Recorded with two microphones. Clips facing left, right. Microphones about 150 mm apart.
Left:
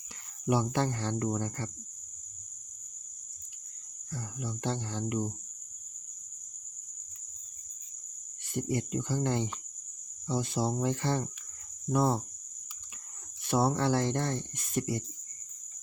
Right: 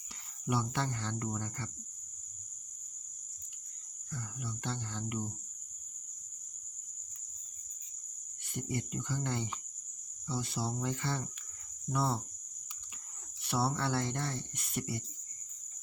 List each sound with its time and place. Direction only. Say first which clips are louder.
0.4 s speech: left 6 dB; 40° left (ahead or behind)
4.1 s speech: left 4 dB; 40° left (ahead or behind)
8.7 s speech: left 5 dB; 35° left (ahead or behind)
13.4 s speech: left 6 dB; 50° left (ahead or behind)